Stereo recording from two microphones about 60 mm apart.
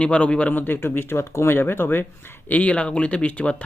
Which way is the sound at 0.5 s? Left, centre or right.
Left.